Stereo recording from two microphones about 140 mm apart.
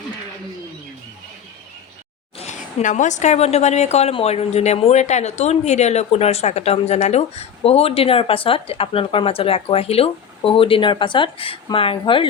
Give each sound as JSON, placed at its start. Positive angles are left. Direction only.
{"t": 2.4, "sound": "a woman's voice", "side_deg": 55}